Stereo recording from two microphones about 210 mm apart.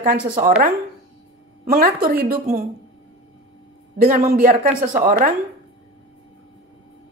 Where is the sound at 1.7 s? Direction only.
45° right (ahead or behind).